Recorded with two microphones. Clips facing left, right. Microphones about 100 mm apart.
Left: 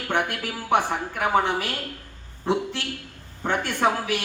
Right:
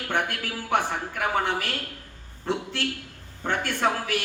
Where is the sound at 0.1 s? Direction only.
15° left (ahead or behind).